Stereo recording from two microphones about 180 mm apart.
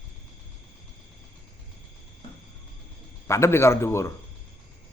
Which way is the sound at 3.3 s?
15° left (ahead or behind).